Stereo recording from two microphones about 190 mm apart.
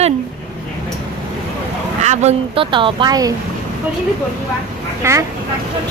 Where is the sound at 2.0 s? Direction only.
30° right (ahead or behind).